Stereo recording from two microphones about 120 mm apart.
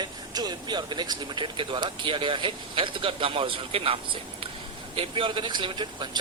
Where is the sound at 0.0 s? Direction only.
35° right (ahead or behind).